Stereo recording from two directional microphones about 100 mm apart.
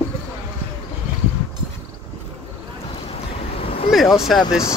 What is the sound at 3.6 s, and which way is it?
Vehicle, 70° left (ahead or behind).